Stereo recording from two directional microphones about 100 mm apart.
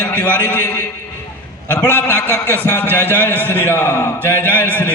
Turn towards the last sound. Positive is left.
turn(degrees=20)  # may be behind; listen again after turning